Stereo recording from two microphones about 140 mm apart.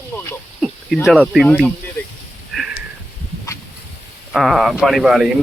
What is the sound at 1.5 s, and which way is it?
Speech, 10° left (ahead or behind).